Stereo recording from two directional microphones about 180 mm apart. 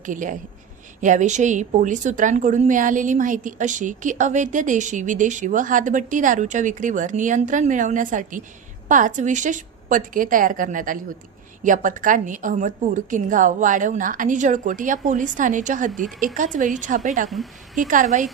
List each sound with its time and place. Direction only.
0.0 s a woman's voice: 45° right (ahead or behind)
17.2 s speech: centre (ahead or behind)
17.7 s a woman's voice: 45° right (ahead or behind)